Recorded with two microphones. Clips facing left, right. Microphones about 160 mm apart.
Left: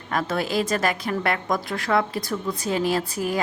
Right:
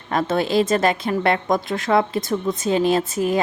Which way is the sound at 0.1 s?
25° right (ahead or behind).